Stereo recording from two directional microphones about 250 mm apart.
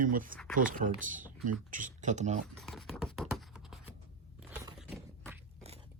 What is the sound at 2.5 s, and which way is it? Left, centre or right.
Computer keyboard, centre.